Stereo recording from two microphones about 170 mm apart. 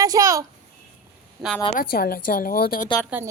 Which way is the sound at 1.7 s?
60° left (ahead or behind).